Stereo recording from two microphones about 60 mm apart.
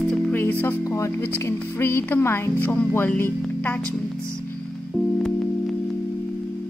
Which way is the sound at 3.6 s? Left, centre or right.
Left.